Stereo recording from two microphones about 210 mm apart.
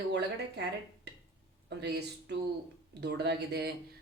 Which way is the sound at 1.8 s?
55° right (ahead or behind).